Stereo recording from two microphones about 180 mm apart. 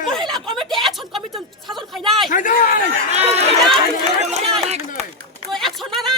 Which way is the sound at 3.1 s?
35° right (ahead or behind).